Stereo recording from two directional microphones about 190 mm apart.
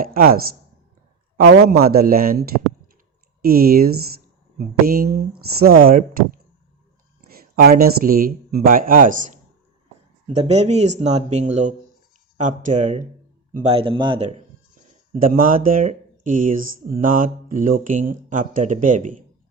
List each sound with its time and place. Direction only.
0.0 s speech: 50° right (ahead or behind)
1.4 s speech: 55° right (ahead or behind); by 14.4 s 35° right (ahead or behind)
15.1 s speech: 45° right (ahead or behind)